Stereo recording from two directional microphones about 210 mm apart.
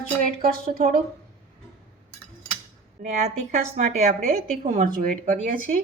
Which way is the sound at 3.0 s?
35° right (ahead or behind).